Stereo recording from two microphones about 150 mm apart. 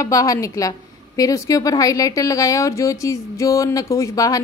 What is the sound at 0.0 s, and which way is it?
A woman's voice, 20° left (ahead or behind).